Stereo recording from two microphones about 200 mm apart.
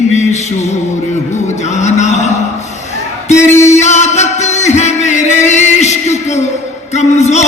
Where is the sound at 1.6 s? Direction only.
35° left (ahead or behind).